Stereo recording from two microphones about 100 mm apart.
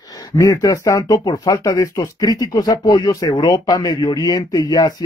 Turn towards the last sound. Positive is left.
turn(degrees=40)  # may be behind; listen again after turning